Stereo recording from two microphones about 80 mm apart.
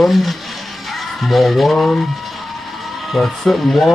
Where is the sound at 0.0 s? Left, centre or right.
Centre.